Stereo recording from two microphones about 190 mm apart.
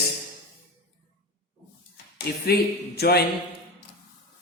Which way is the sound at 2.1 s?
55° left (ahead or behind).